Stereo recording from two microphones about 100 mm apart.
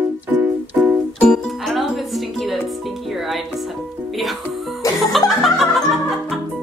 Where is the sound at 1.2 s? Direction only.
5° left (ahead or behind).